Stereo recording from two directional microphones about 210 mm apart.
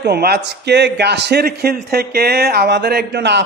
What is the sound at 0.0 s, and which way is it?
A man's voice, 50° right (ahead or behind).